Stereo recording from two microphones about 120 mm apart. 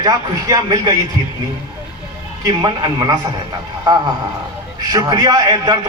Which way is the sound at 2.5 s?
40° right (ahead or behind).